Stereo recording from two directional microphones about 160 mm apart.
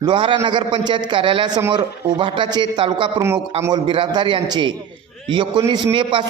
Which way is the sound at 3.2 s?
15° right (ahead or behind).